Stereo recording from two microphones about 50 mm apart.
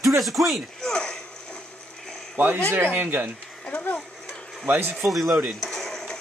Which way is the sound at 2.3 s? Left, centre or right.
Right.